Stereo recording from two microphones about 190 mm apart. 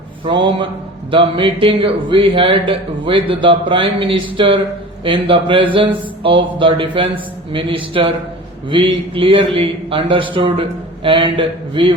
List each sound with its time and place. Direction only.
0.3 s speech: 25° right (ahead or behind)